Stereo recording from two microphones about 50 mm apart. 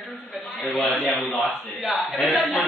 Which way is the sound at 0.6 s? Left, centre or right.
Centre.